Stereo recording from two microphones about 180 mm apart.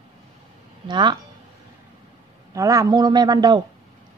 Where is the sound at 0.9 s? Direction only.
25° right (ahead or behind).